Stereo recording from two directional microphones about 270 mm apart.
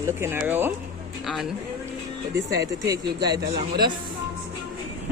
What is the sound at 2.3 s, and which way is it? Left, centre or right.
Speech, right.